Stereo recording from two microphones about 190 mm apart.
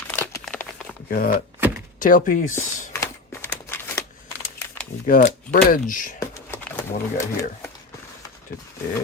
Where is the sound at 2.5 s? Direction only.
15° left (ahead or behind).